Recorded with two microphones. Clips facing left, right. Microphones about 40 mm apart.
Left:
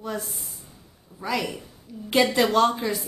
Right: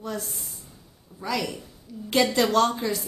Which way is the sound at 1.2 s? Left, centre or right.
Centre.